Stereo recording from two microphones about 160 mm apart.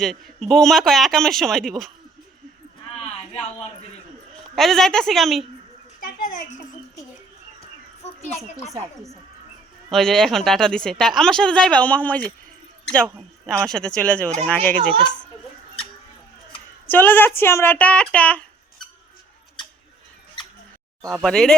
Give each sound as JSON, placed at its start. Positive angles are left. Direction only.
{"t": 0.0, "sound": "speech", "side_deg": 0}
{"t": 4.5, "sound": "speech", "side_deg": 0}
{"t": 6.0, "sound": "a child's voice", "side_deg": 65}
{"t": 9.9, "sound": "speech", "side_deg": 5}
{"t": 13.7, "sound": "speech", "side_deg": 5}
{"t": 16.8, "sound": "speech", "side_deg": 10}
{"t": 21.2, "sound": "speech", "side_deg": 5}